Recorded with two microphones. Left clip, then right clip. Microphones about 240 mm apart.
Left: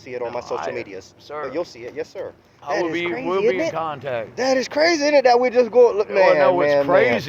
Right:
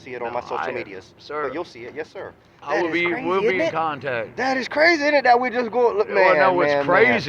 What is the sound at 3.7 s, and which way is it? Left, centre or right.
Speech, right.